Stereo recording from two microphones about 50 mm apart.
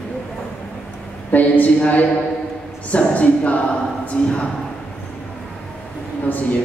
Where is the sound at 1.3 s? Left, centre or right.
Left.